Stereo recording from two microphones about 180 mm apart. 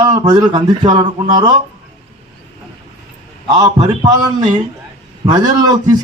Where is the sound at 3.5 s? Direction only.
20° right (ahead or behind).